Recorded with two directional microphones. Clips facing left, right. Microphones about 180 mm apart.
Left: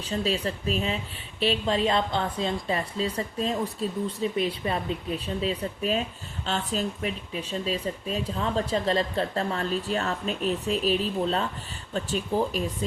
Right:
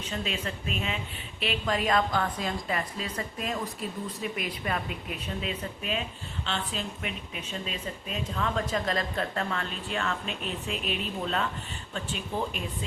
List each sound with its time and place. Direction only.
0.0 s a woman's voice: 35° left (ahead or behind)